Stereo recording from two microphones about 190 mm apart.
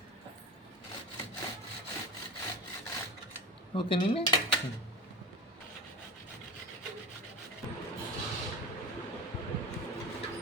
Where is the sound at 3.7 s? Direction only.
25° left (ahead or behind).